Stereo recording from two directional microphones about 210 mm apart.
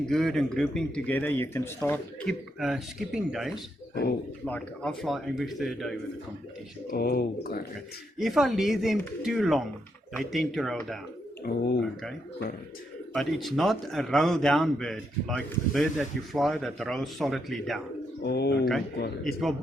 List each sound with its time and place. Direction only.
0.0 s speech: centre (ahead or behind)
6.9 s speech: 45° left (ahead or behind)
8.2 s speech: centre (ahead or behind)
13.1 s speech: centre (ahead or behind)
18.2 s speech: 50° left (ahead or behind)
19.2 s speech: centre (ahead or behind)